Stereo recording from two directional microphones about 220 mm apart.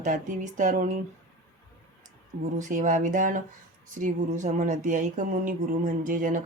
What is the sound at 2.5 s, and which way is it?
Speech, 35° right (ahead or behind).